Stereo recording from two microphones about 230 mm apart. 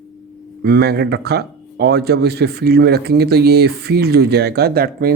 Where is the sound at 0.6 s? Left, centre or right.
Right.